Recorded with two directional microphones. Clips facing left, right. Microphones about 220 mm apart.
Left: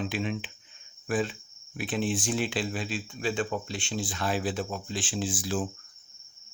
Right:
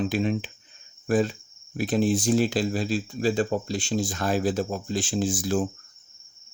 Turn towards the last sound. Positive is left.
turn(degrees=-45)  # may be behind; listen again after turning